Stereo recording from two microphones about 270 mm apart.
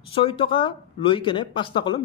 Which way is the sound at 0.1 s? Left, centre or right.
Centre.